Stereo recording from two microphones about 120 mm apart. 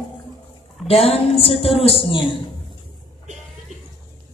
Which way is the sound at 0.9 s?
55° left (ahead or behind).